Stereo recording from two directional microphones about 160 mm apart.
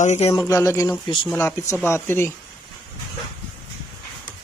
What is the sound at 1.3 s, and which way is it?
Speech, 15° left (ahead or behind).